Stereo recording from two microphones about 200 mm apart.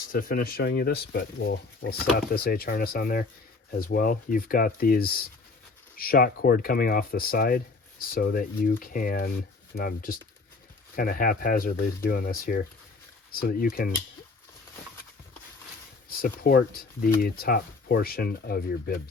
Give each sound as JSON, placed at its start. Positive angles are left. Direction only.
{"t": 0.1, "sound": "speech", "side_deg": 45}
{"t": 16.0, "sound": "speech", "side_deg": 45}